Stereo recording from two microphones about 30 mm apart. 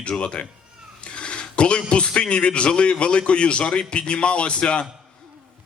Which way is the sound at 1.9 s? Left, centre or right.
Left.